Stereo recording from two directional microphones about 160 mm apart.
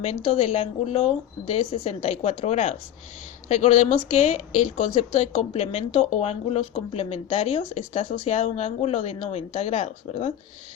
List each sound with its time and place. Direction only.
0.0 s a woman's voice: 40° left (ahead or behind)